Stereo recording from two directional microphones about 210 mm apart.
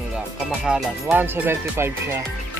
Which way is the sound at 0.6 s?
5° right (ahead or behind).